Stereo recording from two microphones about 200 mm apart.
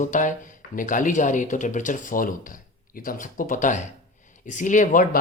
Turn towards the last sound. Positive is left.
turn(degrees=40)  # may be behind; listen again after turning